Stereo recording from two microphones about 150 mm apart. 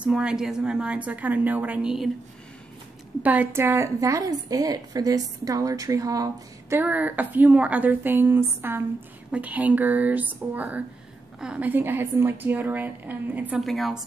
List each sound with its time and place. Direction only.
0.0 s a woman's voice: 5° right (ahead or behind)
3.2 s a woman's voice: 10° right (ahead or behind)
6.8 s a woman's voice: 10° right (ahead or behind)
13.6 s a woman's voice: centre (ahead or behind)